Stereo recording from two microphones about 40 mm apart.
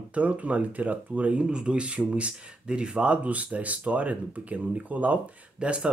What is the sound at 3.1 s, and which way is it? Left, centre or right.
Speech, right.